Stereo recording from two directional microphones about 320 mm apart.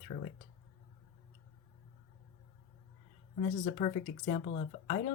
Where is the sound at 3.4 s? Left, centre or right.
Centre.